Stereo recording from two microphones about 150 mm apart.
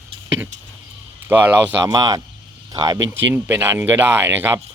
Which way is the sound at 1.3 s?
15° right (ahead or behind).